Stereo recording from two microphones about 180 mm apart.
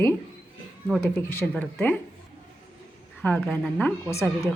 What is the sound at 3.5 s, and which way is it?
Speech, 5° left (ahead or behind).